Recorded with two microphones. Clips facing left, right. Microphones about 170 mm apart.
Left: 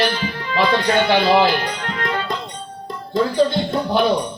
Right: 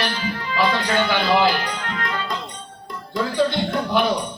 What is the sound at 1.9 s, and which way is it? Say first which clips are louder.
Music: left 6 dB; 35° left (ahead or behind).